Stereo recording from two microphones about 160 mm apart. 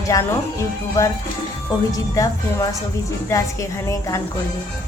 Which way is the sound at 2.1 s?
20° left (ahead or behind).